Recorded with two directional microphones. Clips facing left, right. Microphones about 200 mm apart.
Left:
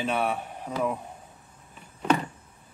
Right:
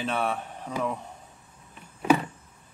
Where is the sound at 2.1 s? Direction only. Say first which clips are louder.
Right 3 dB; 10° right (ahead or behind).